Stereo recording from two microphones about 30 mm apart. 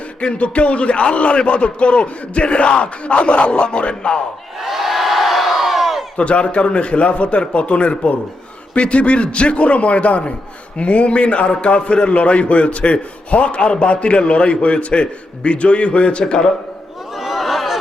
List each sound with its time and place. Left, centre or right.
0.2 s a man's voice: left
4.6 s crowd: centre
6.1 s a man's voice: left
17.2 s a sound: centre